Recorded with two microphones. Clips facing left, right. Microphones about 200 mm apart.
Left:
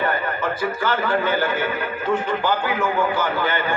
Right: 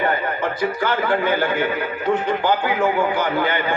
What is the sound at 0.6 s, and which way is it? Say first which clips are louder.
A man's voice: right 2 dB; 15° right (ahead or behind).